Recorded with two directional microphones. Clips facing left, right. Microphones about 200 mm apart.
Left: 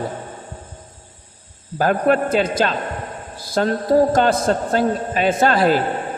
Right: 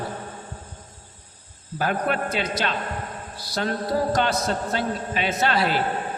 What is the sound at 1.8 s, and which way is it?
A man's voice, 45° left (ahead or behind).